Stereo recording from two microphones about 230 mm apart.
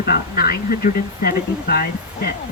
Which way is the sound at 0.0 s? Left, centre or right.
Left.